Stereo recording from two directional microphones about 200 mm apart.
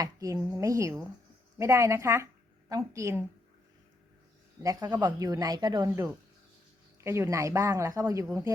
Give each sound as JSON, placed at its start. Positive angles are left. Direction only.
{"t": 0.0, "sound": "speech", "side_deg": -15}
{"t": 4.6, "sound": "speech", "side_deg": -15}